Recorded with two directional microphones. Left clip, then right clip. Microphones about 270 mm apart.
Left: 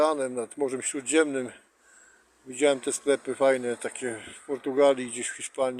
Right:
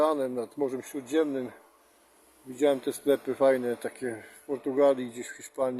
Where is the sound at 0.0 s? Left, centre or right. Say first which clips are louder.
Left 1 dB; centre.